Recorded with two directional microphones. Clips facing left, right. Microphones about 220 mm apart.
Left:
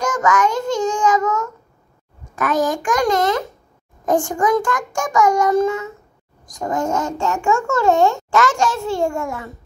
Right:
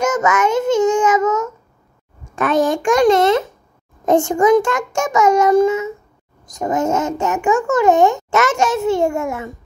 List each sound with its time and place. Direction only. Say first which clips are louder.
0.0 s a child's voice: right 2 dB; 20° right (ahead or behind)